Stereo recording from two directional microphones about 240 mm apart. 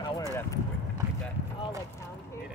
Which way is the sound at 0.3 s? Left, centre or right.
Centre.